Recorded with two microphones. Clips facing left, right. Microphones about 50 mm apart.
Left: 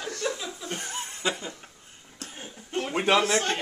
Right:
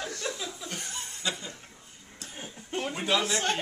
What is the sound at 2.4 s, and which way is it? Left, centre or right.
Television, centre.